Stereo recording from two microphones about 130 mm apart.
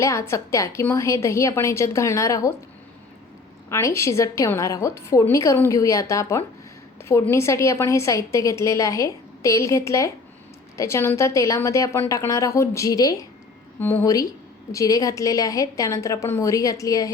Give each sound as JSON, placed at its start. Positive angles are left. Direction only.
{"t": 0.0, "sound": "a woman's voice", "side_deg": 20}
{"t": 3.7, "sound": "a woman's voice", "side_deg": 20}